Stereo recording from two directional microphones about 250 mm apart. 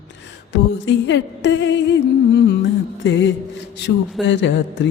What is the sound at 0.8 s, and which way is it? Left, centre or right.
Music, left.